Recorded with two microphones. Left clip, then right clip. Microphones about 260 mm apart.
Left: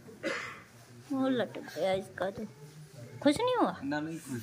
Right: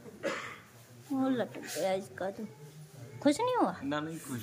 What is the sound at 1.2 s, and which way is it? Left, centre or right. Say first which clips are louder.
Speech: left 2 dB; centre.